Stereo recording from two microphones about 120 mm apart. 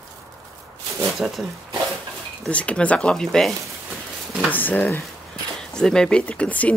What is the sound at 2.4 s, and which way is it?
Speech, 10° left (ahead or behind).